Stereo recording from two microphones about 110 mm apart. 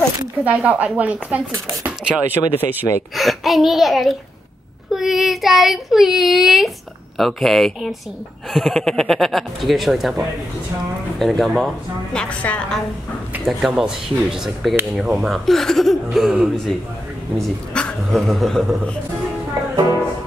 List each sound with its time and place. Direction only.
0.4 s speech: 15° right (ahead or behind)
3.2 s speech: centre (ahead or behind)
13.5 s speech: 5° right (ahead or behind)